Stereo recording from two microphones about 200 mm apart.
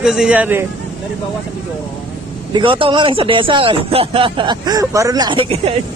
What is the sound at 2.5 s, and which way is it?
Speech, 25° right (ahead or behind).